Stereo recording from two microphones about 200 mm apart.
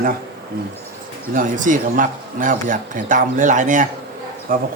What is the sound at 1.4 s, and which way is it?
Speech, 40° right (ahead or behind).